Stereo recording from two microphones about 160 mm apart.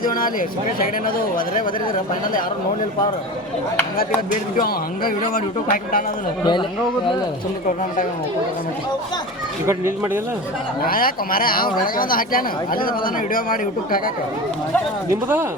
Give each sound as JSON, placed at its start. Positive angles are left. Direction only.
{"t": 0.0, "sound": "speech", "side_deg": 60}
{"t": 4.5, "sound": "speech", "side_deg": 65}
{"t": 6.4, "sound": "speech", "side_deg": 30}
{"t": 9.6, "sound": "speech", "side_deg": -20}
{"t": 10.8, "sound": "speech", "side_deg": 65}
{"t": 15.1, "sound": "speech", "side_deg": -15}